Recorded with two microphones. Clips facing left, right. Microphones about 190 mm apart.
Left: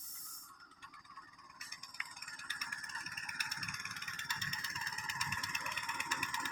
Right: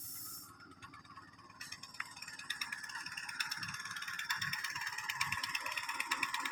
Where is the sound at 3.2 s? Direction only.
10° left (ahead or behind).